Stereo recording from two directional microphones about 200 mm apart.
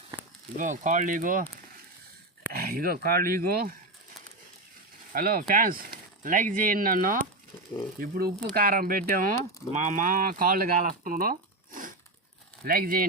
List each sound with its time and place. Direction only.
0.5 s speech: 40° right (ahead or behind)
2.5 s speech: 50° right (ahead or behind)
5.1 s speech: 45° right (ahead or behind)